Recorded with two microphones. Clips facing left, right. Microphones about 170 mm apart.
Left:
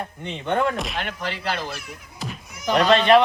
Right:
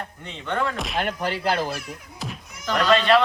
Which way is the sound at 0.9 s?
45° right (ahead or behind).